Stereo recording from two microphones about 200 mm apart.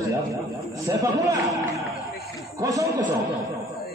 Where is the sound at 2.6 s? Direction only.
15° right (ahead or behind).